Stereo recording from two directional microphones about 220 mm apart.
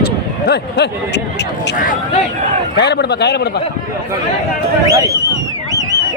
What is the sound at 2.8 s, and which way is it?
Speech, 50° left (ahead or behind).